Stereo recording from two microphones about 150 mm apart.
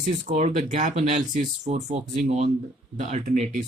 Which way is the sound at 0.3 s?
50° right (ahead or behind).